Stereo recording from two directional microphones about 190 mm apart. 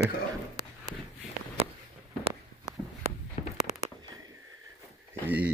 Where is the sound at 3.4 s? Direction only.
40° left (ahead or behind).